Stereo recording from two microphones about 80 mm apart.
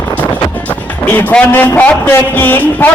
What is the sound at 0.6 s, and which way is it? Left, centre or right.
A man's voice, centre.